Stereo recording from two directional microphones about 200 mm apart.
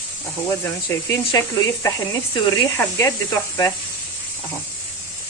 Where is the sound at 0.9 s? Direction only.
15° left (ahead or behind).